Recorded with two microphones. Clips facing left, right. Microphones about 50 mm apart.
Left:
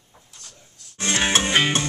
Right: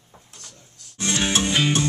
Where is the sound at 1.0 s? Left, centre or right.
Left.